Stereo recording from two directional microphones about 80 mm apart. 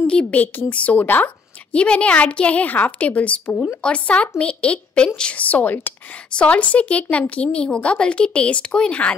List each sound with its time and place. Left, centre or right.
0.0 s a woman's voice: centre